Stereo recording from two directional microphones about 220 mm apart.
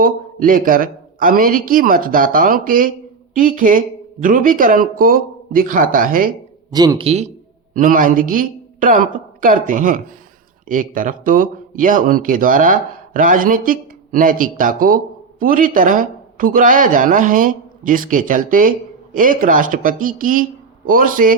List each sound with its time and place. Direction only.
0.0 s speech: 40° right (ahead or behind)
6.7 s speech: 20° right (ahead or behind)
7.7 s a woman's voice: 40° right (ahead or behind)